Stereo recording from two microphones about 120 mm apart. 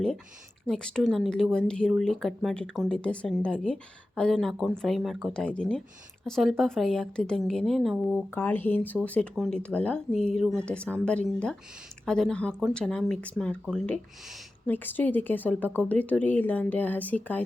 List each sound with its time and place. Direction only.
0.7 s a woman's voice: 5° left (ahead or behind)
8.3 s speech: 15° left (ahead or behind)
9.3 s a woman's voice: centre (ahead or behind)
9.6 s speech: 10° left (ahead or behind)